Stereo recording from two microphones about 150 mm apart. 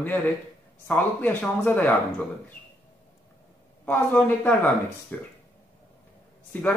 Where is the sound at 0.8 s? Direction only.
10° left (ahead or behind).